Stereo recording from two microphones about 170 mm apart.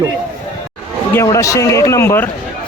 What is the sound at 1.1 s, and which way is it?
A man's voice, 20° left (ahead or behind).